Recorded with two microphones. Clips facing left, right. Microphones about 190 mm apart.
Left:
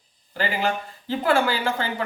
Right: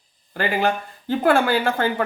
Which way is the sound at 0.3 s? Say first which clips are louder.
Right 3 dB; 55° right (ahead or behind).